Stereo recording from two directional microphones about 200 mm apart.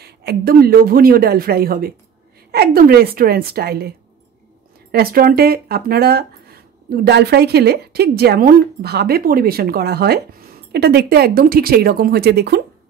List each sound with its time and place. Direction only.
0.0 s speech: 55° right (ahead or behind)
4.9 s speech: 45° right (ahead or behind)